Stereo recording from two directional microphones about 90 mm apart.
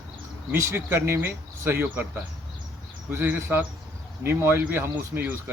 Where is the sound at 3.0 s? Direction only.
25° right (ahead or behind).